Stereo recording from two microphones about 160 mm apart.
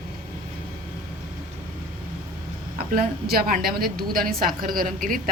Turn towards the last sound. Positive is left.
turn(degrees=-60)  # may be behind; listen again after turning